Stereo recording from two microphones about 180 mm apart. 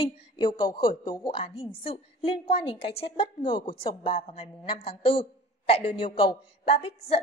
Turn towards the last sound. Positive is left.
turn(degrees=35)  # may be behind; listen again after turning